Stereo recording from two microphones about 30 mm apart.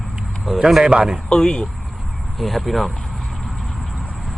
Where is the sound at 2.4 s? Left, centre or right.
Centre.